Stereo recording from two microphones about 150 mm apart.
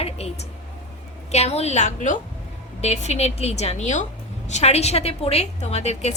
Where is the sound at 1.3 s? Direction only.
45° left (ahead or behind).